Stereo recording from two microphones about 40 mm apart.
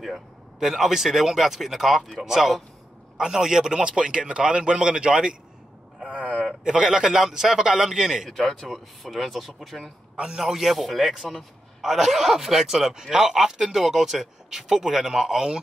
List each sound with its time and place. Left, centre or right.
0.7 s a man's voice: centre
5.9 s a sound: right
6.6 s speech: centre
8.3 s speech: centre